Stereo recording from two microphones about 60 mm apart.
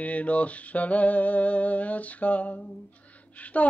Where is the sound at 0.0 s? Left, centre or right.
Left.